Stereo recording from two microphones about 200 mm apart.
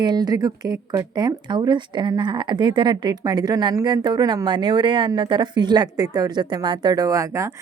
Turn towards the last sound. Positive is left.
turn(degrees=-15)  # may be behind; listen again after turning